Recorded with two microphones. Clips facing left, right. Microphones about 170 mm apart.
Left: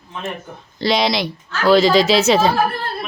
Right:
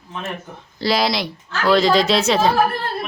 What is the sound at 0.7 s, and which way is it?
A woman's voice, centre (ahead or behind).